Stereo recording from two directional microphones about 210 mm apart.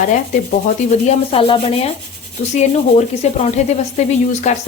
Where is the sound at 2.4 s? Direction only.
30° left (ahead or behind).